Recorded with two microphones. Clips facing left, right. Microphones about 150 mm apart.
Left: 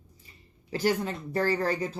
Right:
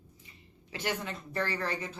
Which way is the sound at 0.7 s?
35° left (ahead or behind).